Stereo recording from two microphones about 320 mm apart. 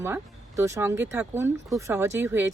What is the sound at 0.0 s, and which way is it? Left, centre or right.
Speech, centre.